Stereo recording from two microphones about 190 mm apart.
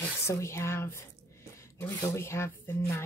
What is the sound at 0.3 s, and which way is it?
Speech, 15° left (ahead or behind).